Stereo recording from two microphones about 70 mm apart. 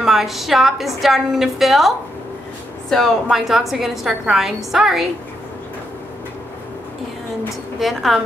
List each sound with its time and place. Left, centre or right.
0.0 s a woman's voice: centre
7.8 s a woman's voice: centre